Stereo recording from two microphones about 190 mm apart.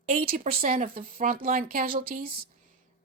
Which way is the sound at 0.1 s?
45° right (ahead or behind).